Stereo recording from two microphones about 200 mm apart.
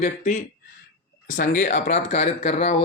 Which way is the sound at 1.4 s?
40° left (ahead or behind).